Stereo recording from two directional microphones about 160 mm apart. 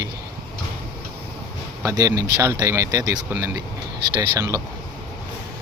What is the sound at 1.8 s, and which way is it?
Speech, 20° right (ahead or behind).